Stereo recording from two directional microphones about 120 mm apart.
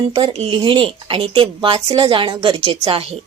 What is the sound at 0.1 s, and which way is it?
A woman's voice, 50° right (ahead or behind).